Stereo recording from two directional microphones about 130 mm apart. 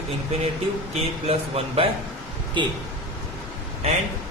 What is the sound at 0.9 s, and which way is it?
Speech, 50° right (ahead or behind).